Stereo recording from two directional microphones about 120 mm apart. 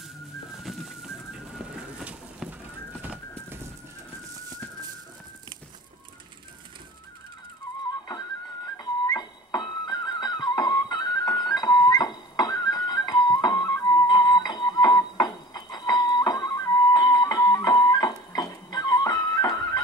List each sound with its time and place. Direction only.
0.6 s pigeon: centre (ahead or behind)
3.0 s horse: 15° right (ahead or behind)
8.6 s music: 35° left (ahead or behind)